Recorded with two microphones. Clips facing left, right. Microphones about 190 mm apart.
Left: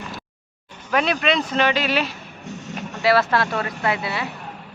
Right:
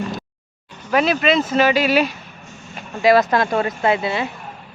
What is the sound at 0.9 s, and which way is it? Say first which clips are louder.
Speech: right 4 dB; 5° right (ahead or behind).